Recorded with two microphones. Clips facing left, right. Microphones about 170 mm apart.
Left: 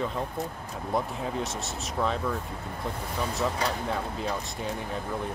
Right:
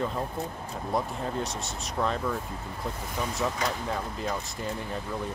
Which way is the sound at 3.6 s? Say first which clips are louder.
Even; 30° left (ahead or behind).